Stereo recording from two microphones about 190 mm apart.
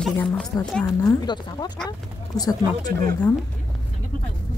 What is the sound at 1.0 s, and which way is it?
A woman's voice, 20° left (ahead or behind).